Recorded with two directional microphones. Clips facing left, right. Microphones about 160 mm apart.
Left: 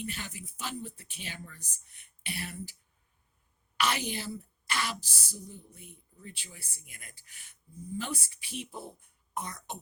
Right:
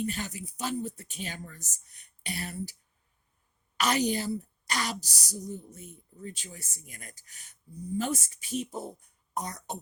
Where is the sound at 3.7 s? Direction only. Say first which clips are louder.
Right 5 dB; 40° right (ahead or behind).